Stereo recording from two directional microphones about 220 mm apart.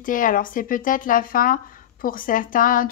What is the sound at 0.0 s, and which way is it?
Speech, 40° left (ahead or behind).